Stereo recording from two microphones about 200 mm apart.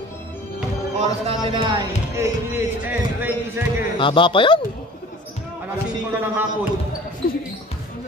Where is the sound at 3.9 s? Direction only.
25° left (ahead or behind).